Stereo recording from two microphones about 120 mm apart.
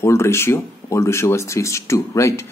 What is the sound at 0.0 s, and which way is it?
Speech, 20° left (ahead or behind).